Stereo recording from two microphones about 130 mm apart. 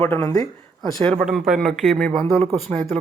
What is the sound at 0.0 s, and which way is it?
Speech, 20° left (ahead or behind).